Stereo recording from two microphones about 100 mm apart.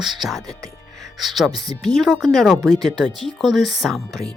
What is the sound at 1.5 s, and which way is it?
Speech, 40° right (ahead or behind).